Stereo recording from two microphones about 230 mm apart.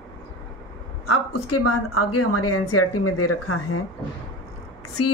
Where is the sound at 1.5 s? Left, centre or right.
Left.